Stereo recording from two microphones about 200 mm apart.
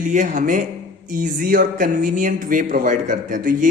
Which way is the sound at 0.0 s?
40° right (ahead or behind).